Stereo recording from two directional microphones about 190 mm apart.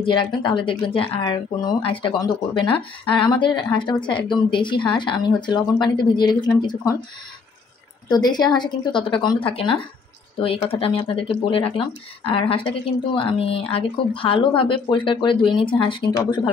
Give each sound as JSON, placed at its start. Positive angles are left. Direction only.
{"t": 0.0, "sound": "speech", "side_deg": 25}
{"t": 8.1, "sound": "speech", "side_deg": 20}